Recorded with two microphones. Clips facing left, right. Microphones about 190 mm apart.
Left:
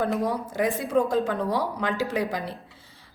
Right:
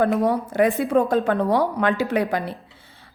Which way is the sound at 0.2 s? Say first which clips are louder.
Right 6 dB; 65° right (ahead or behind).